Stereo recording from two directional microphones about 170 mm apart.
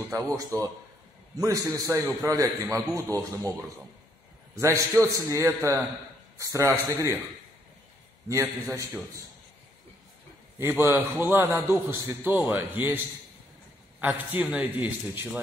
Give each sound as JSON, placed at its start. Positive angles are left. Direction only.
{"t": 0.1, "sound": "a man's voice", "side_deg": -20}
{"t": 4.6, "sound": "a man's voice", "side_deg": -15}
{"t": 8.3, "sound": "a man's voice", "side_deg": -20}
{"t": 10.6, "sound": "a man's voice", "side_deg": -15}
{"t": 14.0, "sound": "a man's voice", "side_deg": -10}